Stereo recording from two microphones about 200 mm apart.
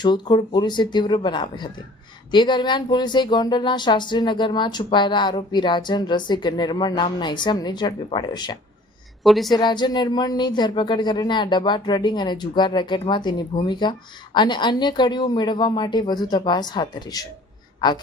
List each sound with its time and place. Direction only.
0.0 s speech: 20° left (ahead or behind)
9.2 s a woman's voice: centre (ahead or behind)
9.6 s a man's voice: 20° left (ahead or behind)